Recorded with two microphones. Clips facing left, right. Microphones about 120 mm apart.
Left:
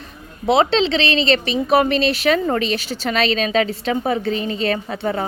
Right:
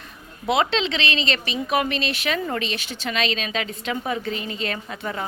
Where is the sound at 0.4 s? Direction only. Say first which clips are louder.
Left 6 dB; 30° left (ahead or behind).